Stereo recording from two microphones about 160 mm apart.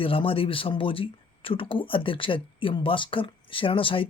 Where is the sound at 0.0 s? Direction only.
35° left (ahead or behind).